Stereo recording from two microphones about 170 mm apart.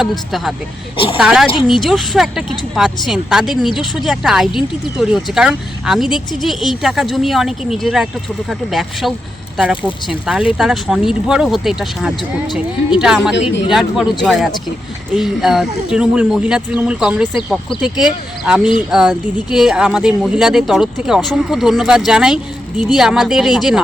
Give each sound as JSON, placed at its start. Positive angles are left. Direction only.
{"t": 0.0, "sound": "speech", "side_deg": 0}
{"t": 0.9, "sound": "a woman's voice", "side_deg": 30}
{"t": 1.2, "sound": "speech", "side_deg": -5}